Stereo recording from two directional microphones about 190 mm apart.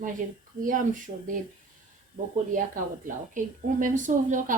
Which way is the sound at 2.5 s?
45° right (ahead or behind).